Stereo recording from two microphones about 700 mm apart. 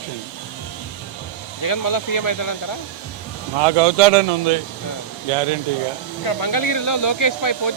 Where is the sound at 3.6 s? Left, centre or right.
Right.